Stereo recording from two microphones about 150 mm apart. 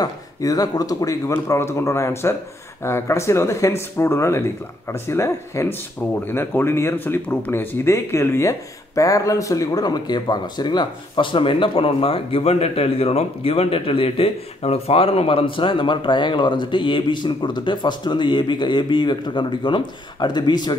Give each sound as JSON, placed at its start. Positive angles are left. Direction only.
{"t": 0.0, "sound": "speech", "side_deg": 25}